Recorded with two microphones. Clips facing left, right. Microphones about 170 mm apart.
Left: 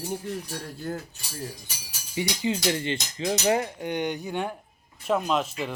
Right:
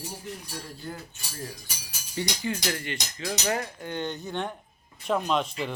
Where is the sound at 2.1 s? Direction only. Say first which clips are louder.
Left 3 dB; 15° left (ahead or behind).